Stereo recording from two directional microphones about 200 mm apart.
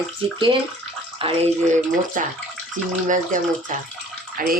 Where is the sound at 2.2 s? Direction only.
40° right (ahead or behind).